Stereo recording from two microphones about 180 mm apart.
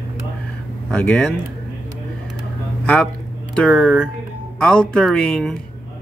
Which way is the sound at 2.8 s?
5° left (ahead or behind).